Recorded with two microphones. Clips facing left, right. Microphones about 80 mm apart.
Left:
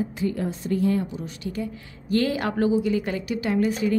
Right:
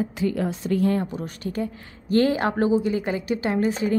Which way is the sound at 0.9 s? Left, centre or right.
Right.